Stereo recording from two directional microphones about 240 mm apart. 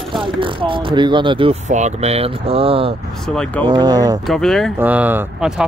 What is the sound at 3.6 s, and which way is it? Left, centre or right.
Speech, centre.